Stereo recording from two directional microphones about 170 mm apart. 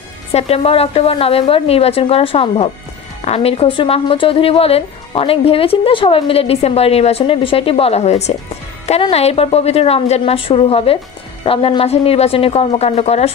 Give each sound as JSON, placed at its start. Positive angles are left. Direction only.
{"t": 0.3, "sound": "a woman's voice", "side_deg": 35}